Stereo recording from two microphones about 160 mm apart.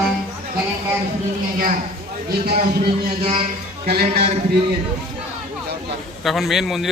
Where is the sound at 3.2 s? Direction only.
40° right (ahead or behind).